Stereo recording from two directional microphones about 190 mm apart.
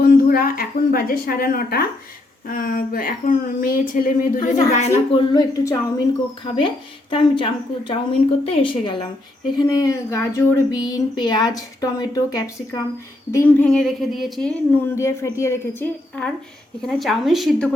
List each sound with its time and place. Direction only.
0.0 s a woman's voice: 50° left (ahead or behind); by 5.2 s 35° left (ahead or behind)
5.3 s speech: 20° left (ahead or behind)
13.7 s a woman's voice: centre (ahead or behind)